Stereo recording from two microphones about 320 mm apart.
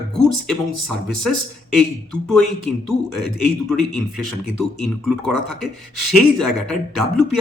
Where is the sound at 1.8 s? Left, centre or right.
Centre.